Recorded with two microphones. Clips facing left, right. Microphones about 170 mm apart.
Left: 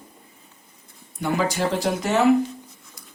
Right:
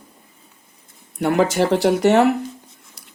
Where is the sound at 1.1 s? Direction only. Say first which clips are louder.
Right 6 dB; 65° right (ahead or behind).